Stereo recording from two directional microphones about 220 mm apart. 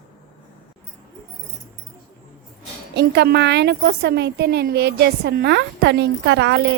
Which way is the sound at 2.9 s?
50° right (ahead or behind).